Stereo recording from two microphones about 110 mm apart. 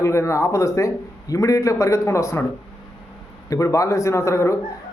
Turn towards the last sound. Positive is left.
turn(degrees=25)  # may be behind; listen again after turning